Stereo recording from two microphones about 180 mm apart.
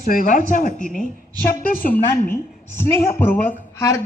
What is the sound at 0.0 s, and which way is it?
Speech, 50° left (ahead or behind).